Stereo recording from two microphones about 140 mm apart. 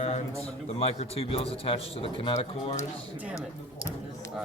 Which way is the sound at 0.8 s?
45° left (ahead or behind).